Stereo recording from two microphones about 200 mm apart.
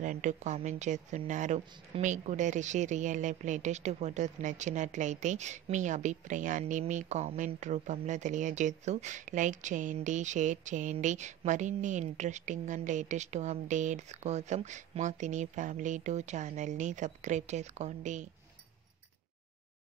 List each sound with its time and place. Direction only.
0.0 s a woman's voice: 40° right (ahead or behind)